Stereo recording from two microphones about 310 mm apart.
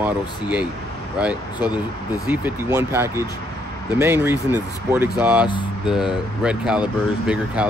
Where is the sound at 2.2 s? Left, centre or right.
Centre.